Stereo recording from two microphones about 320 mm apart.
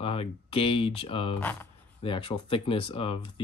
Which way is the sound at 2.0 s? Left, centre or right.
Centre.